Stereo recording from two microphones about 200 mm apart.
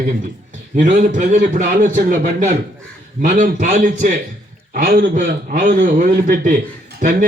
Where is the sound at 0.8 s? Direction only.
40° right (ahead or behind).